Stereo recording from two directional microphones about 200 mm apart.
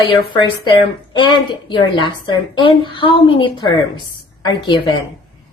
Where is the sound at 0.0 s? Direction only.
25° left (ahead or behind).